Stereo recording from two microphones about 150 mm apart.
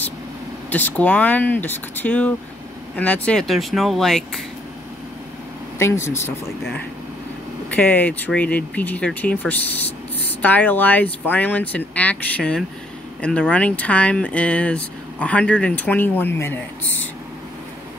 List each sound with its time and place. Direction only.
0.7 s speech: 10° left (ahead or behind)
5.8 s speech: 20° left (ahead or behind)
7.7 s speech: 10° left (ahead or behind)